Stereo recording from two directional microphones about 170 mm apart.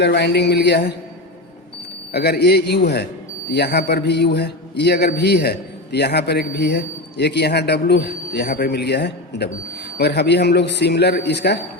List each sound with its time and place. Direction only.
0.0 s a man's voice: 85° left
2.1 s a man's voice: 70° left (ahead or behind)